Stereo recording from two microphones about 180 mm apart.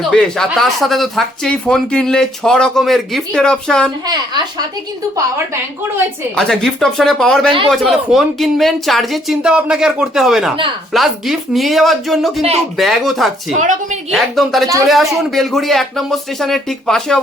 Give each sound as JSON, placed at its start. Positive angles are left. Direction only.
{"t": 0.0, "sound": "speech", "side_deg": 5}
{"t": 6.3, "sound": "speech", "side_deg": 5}
{"t": 13.5, "sound": "speech", "side_deg": -45}
{"t": 14.1, "sound": "speech", "side_deg": 0}